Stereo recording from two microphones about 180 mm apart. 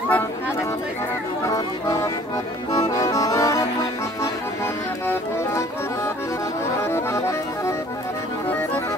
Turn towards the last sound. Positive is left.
turn(degrees=15)  # may be behind; listen again after turning